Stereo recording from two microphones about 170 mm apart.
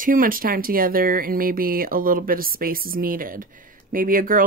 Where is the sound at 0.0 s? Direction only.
55° right (ahead or behind).